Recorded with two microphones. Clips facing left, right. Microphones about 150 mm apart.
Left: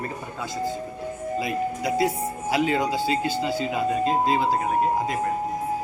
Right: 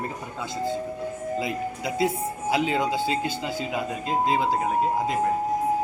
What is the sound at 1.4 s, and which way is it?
A man's voice, 25° right (ahead or behind).